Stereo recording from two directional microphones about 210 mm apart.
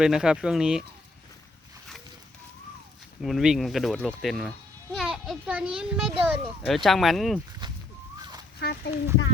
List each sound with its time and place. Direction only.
0.0 s speech: 5° right (ahead or behind)
3.2 s speech: centre (ahead or behind)
8.6 s speech: 50° left (ahead or behind)